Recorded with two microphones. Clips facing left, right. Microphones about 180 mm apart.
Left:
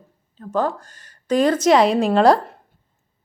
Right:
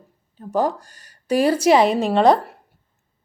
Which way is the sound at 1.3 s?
10° right (ahead or behind).